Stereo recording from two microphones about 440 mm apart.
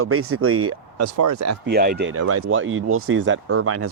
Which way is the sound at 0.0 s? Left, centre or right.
Right.